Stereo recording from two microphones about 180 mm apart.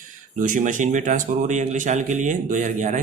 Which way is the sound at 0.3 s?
45° right (ahead or behind).